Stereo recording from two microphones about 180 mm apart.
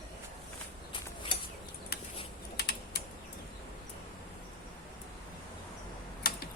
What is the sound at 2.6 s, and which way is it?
Typing, 60° left (ahead or behind).